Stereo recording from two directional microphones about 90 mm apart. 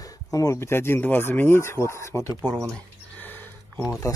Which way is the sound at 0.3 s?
40° left (ahead or behind).